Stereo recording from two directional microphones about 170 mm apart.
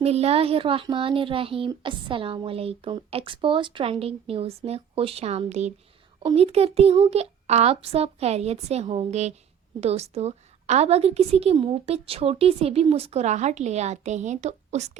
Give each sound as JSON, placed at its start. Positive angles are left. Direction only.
{"t": 0.0, "sound": "speech", "side_deg": -35}